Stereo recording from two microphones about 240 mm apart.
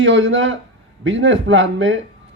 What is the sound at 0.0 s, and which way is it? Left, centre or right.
Speech, right.